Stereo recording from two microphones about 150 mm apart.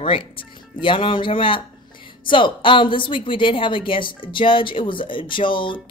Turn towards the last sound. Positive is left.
turn(degrees=35)  # may be behind; listen again after turning